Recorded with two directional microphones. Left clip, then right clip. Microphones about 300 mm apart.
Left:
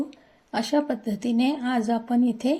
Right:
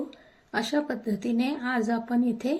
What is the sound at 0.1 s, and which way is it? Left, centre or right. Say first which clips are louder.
A woman's voice: left 1 dB; left.